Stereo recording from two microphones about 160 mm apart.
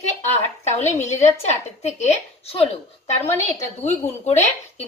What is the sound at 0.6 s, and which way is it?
A woman's voice, 45° left (ahead or behind).